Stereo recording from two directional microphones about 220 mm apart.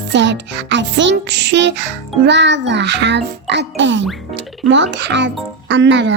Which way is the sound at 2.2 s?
55° right (ahead or behind).